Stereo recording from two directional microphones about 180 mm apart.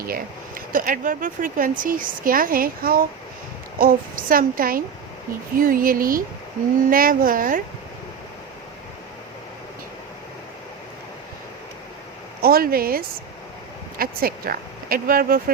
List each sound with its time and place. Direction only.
0.0 s speech: 50° right (ahead or behind)
12.4 s speech: 55° right (ahead or behind)
14.0 s speech: 55° right (ahead or behind)